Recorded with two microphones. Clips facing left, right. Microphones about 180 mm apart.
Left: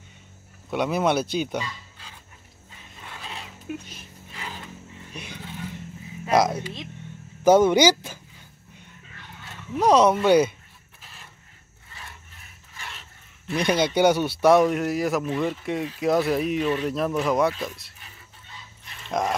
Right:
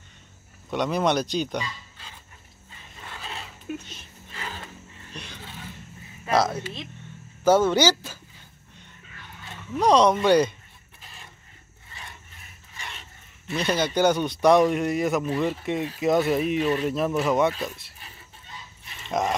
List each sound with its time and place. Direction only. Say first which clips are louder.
0.7 s speech: left 1 dB; 5° left (ahead or behind)
3.0 s dog: right 1 dB; 10° left (ahead or behind)
4.3 s a sound: right 1 dB; 10° left (ahead or behind)
6.2 s speech: left 2 dB; 15° left (ahead or behind)
9.8 s speech: left 1 dB; 5° left (ahead or behind)
11.0 s printer: right 1 dB; centre (ahead or behind)
12.7 s dog: even; 5° left (ahead or behind)
13.6 s a man's voice: left 2 dB; 15° left (ahead or behind)
18.9 s dog: even; centre (ahead or behind)